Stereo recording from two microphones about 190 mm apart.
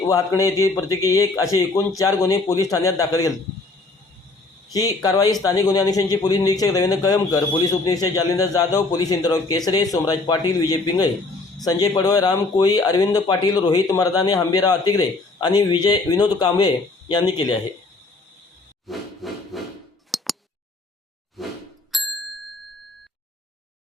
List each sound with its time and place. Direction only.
0.1 s a man's voice: 15° left (ahead or behind)
4.7 s speech: 20° left (ahead or behind)
18.9 s wood: centre (ahead or behind)
20.1 s chink: centre (ahead or behind)
21.4 s a sound: centre (ahead or behind)
21.9 s music: centre (ahead or behind)